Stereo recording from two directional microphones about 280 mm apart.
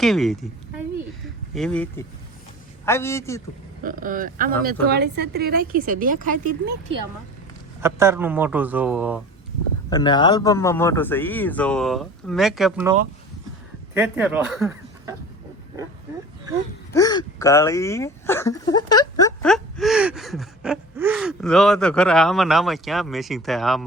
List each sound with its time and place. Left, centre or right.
0.0 s speech: centre
1.5 s speech: centre
3.8 s speech: right
7.8 s speech: centre
9.9 s speech: centre
16.9 s speech: centre